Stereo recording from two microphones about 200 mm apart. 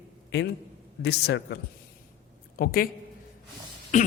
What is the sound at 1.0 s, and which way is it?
Speech, 55° left (ahead or behind).